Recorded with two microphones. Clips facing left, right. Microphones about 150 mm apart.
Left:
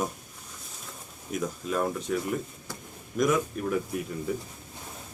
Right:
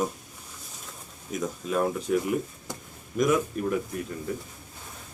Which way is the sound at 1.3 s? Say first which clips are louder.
Right 1 dB; centre (ahead or behind).